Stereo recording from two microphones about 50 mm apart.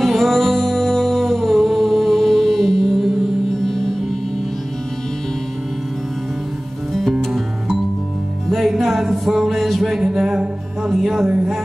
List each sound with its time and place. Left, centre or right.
0.0 s music: centre
7.3 s music: centre
10.0 s music: centre
11.2 s music: right